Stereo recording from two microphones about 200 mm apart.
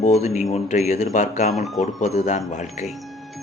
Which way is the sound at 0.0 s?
35° left (ahead or behind).